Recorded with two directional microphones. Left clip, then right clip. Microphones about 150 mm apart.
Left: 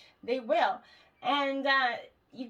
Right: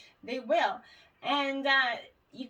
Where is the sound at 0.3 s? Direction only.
35° left (ahead or behind).